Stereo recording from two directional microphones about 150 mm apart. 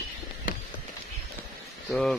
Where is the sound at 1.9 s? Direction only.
5° left (ahead or behind).